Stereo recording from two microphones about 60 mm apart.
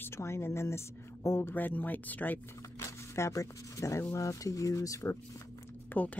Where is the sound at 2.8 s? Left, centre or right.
Left.